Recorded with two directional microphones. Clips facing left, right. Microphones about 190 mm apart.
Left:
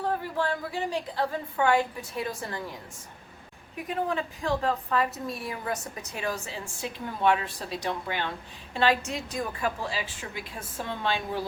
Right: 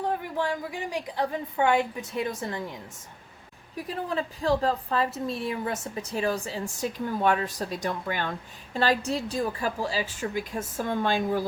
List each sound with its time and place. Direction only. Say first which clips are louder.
0.0 s a woman's voice: even; 15° right (ahead or behind)
3.8 s a woman's voice: left 1 dB; 35° right (ahead or behind)